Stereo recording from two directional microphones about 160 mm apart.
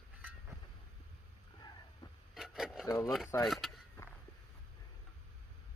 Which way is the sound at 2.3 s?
Centre (ahead or behind).